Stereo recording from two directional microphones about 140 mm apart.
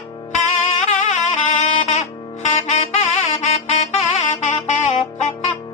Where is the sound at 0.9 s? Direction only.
55° left (ahead or behind).